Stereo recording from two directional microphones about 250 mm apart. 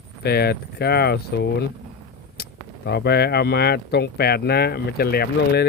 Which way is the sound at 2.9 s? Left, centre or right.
Left.